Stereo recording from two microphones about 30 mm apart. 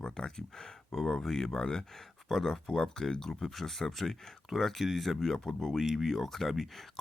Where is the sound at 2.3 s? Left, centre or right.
Centre.